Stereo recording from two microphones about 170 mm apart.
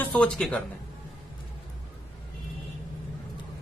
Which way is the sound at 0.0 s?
5° left (ahead or behind).